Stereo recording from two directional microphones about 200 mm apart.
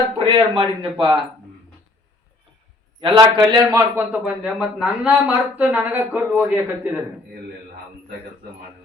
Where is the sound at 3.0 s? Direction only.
25° right (ahead or behind); by 7.0 s 10° right (ahead or behind).